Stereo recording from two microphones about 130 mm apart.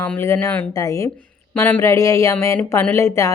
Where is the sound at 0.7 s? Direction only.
25° left (ahead or behind).